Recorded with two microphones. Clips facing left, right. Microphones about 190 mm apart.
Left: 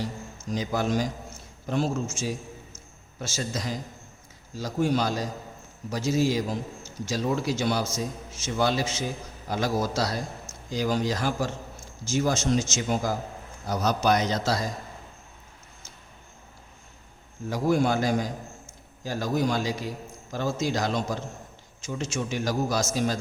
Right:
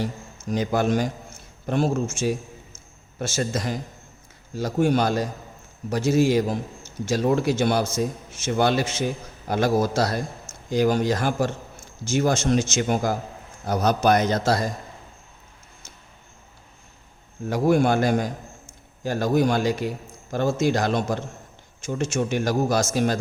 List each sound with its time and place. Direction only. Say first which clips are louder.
0.5 s a man's voice: right 4 dB; 60° right (ahead or behind)
17.5 s speech: right 4 dB; 60° right (ahead or behind)